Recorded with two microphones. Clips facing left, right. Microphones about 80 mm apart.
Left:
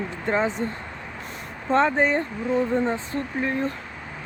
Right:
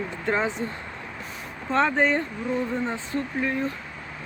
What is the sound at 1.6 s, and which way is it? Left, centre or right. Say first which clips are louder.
Speech: left 2 dB; left.